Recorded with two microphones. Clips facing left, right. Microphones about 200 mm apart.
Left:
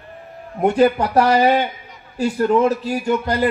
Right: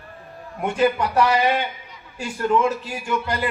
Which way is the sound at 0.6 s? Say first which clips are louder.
Left 5 dB; 40° left (ahead or behind).